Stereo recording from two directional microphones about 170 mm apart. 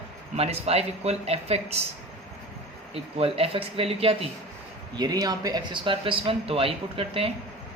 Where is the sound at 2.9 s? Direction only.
35° right (ahead or behind).